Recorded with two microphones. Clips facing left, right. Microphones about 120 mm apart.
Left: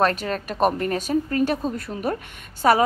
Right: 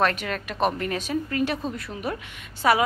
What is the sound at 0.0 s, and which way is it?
A woman's voice, 35° left (ahead or behind).